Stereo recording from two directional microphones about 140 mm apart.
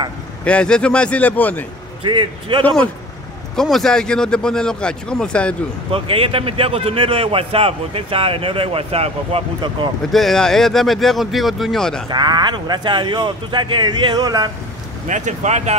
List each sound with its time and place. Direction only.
0.5 s a man's voice: 5° left (ahead or behind)
2.0 s a man's voice: 35° right (ahead or behind)
2.6 s a man's voice: 10° left (ahead or behind)
5.9 s a man's voice: 40° right (ahead or behind)
10.1 s speech: centre (ahead or behind)
12.1 s a man's voice: 30° right (ahead or behind)
15.0 s speech: 60° right (ahead or behind)